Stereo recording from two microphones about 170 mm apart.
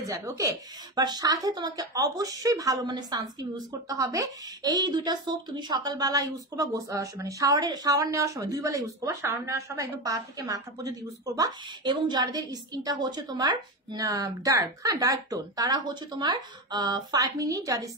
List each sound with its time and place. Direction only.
0.0 s a woman's voice: 20° right (ahead or behind)